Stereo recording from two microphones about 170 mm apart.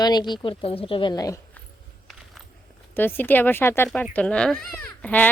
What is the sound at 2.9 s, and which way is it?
Speech, 10° left (ahead or behind).